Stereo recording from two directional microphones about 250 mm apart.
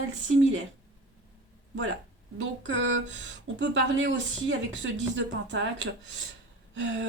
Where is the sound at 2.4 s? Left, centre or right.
Right.